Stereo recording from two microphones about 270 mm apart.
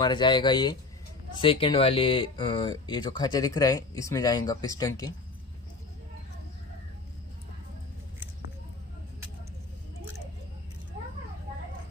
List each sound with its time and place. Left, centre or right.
0.0 s speech: centre